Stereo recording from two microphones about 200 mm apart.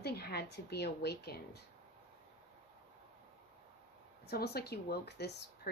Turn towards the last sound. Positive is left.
turn(degrees=55)  # may be behind; listen again after turning